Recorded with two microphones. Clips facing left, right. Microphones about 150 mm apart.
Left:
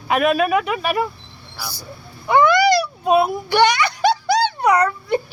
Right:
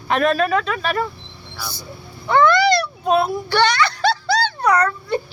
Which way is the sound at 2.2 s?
15° left (ahead or behind).